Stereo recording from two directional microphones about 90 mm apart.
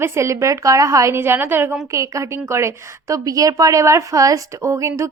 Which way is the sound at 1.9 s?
35° right (ahead or behind).